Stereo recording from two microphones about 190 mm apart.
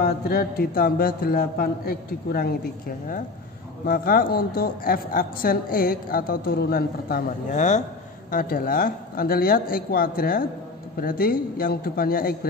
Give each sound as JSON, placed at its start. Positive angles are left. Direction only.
{"t": 0.0, "sound": "a man's voice", "side_deg": 50}